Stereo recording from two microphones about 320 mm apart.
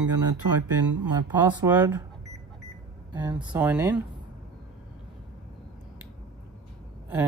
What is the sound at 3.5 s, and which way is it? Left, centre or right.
Speech, centre.